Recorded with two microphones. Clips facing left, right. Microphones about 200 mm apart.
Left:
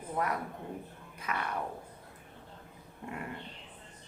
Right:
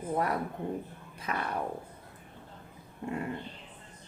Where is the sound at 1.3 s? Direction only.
35° right (ahead or behind).